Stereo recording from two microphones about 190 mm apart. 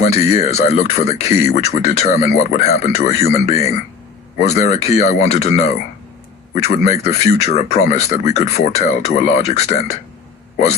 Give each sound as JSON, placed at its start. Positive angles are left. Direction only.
{"t": 0.0, "sound": "speech", "side_deg": 35}